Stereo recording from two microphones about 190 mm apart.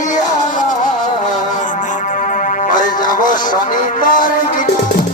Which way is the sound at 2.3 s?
45° left (ahead or behind).